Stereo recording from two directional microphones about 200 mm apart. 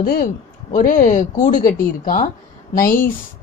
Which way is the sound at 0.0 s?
50° left (ahead or behind).